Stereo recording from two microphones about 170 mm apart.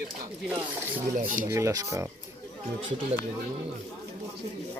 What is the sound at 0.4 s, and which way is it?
Speech, 10° right (ahead or behind).